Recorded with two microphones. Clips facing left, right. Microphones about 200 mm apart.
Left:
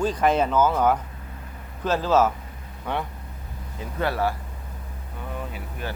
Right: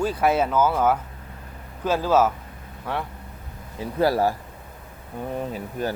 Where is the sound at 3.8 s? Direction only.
35° right (ahead or behind).